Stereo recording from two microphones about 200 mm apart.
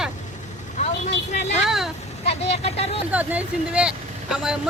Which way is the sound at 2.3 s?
30° left (ahead or behind).